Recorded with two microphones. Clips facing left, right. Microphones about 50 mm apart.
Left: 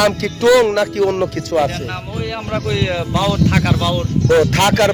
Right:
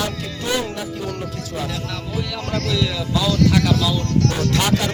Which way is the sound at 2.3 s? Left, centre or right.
Left.